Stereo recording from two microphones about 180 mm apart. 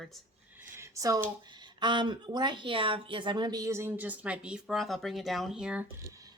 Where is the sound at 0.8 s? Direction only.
15° right (ahead or behind).